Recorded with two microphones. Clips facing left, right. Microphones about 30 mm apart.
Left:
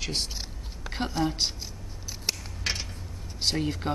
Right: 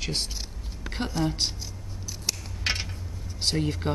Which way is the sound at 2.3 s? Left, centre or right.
Centre.